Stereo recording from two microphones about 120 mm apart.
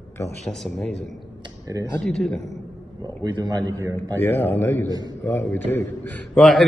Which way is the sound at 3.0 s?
35° right (ahead or behind).